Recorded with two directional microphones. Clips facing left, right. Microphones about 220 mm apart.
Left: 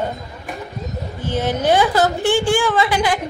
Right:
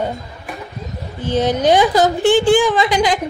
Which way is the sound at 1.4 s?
15° right (ahead or behind).